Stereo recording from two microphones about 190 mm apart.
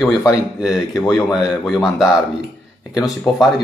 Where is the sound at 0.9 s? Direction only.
15° left (ahead or behind).